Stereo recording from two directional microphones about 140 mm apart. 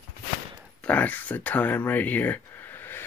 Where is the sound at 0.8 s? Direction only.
10° left (ahead or behind).